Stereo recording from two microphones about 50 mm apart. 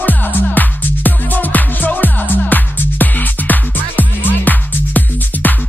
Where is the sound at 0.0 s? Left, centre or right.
Left.